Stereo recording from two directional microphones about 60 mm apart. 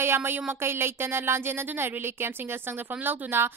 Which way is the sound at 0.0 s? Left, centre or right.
Right.